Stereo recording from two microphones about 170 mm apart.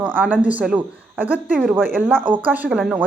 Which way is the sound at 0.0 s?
10° right (ahead or behind).